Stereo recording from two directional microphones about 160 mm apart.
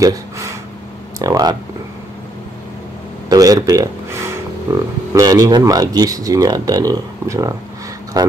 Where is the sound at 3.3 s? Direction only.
25° right (ahead or behind).